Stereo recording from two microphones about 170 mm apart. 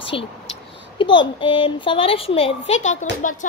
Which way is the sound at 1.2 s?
30° left (ahead or behind).